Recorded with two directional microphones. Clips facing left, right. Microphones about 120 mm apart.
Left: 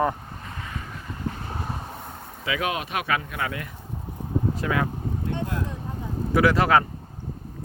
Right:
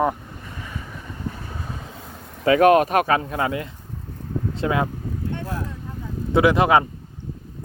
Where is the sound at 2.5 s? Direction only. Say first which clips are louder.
Right 13 dB; 50° right (ahead or behind).